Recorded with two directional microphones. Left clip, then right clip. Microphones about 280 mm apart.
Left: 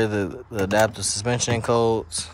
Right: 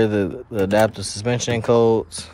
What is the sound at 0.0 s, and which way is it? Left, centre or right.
Speech, centre.